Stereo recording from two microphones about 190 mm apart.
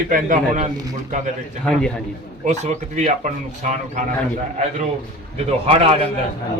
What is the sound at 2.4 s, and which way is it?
Speech, 40° right (ahead or behind).